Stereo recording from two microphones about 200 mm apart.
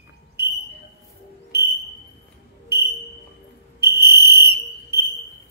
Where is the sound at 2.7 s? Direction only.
55° right (ahead or behind).